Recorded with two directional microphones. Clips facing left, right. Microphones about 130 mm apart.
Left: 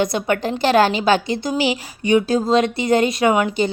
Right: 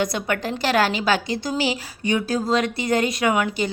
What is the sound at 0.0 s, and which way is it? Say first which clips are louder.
A woman's voice: left 4 dB; 25° left (ahead or behind).